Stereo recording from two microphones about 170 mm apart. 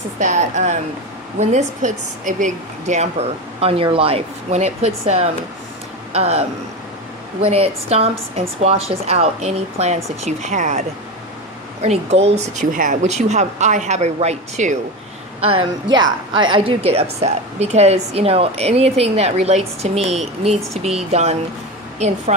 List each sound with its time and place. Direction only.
0.2 s a woman's voice: 45° right (ahead or behind)
7.4 s a woman's voice: 35° right (ahead or behind)
15.4 s a woman's voice: 35° right (ahead or behind)